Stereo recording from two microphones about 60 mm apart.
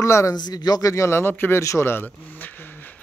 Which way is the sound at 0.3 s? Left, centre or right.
Left.